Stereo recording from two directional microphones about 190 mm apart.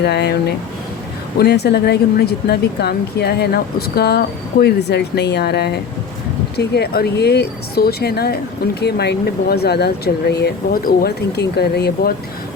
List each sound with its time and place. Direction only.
0.0 s speech: 60° left (ahead or behind)